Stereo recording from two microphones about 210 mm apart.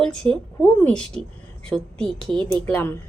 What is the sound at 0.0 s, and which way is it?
Speech, 5° left (ahead or behind).